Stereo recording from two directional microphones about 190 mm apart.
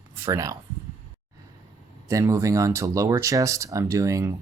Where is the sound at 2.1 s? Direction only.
15° right (ahead or behind).